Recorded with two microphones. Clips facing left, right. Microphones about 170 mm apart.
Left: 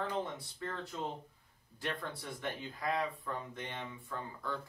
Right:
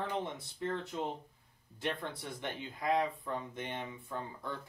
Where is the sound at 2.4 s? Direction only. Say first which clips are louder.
Even; 20° right (ahead or behind).